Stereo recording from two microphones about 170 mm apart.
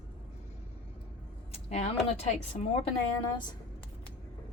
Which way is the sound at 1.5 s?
40° left (ahead or behind).